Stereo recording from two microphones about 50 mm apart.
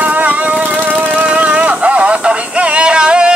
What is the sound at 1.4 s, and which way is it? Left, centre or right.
Music, right.